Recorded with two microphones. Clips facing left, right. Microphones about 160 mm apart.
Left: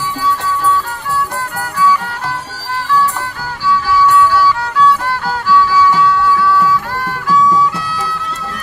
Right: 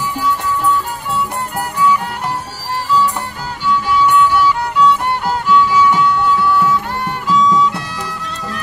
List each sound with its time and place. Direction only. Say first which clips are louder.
1.5 s music: left 1 dB; 20° right (ahead or behind)
3.7 s music: left 2 dB; 20° right (ahead or behind)